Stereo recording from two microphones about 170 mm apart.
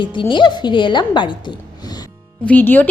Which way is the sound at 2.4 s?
10° left (ahead or behind).